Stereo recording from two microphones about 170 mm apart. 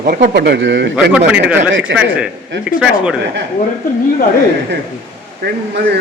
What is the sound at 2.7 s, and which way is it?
Speech, 5° right (ahead or behind).